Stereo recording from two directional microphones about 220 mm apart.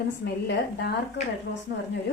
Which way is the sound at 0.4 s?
50° left (ahead or behind).